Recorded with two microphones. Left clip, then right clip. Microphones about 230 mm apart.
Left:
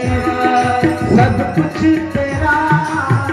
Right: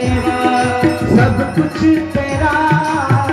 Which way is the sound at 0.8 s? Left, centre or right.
Centre.